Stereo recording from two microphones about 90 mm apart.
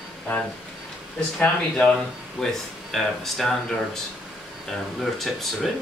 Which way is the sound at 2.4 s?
10° left (ahead or behind).